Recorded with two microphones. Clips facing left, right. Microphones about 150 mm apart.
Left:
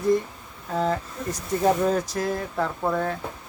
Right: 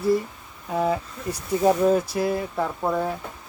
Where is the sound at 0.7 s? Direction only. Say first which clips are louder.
Right 1 dB; 10° right (ahead or behind).